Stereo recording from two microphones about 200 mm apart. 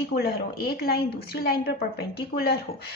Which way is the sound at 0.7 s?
50° left (ahead or behind).